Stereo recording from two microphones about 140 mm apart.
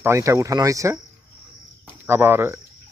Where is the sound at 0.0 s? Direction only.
20° right (ahead or behind).